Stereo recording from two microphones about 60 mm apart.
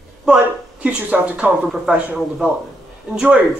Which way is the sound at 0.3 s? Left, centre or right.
Centre.